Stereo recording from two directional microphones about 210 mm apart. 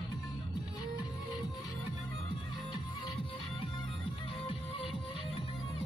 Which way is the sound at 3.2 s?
25° left (ahead or behind).